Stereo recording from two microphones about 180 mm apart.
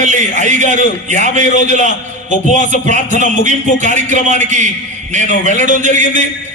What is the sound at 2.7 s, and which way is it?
A man's voice, 45° right (ahead or behind).